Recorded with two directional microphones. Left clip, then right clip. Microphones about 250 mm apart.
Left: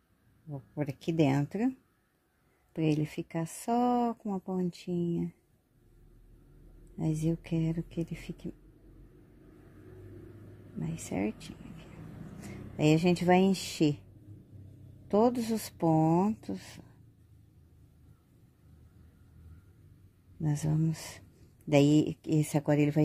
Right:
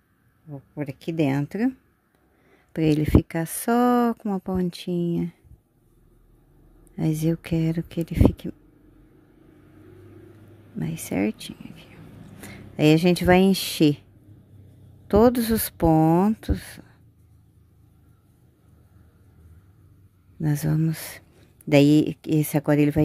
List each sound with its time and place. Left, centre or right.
0.5 s speech: centre
2.7 s speech: right
7.0 s speech: right
10.8 s speech: right
15.0 s speech: right
20.4 s speech: right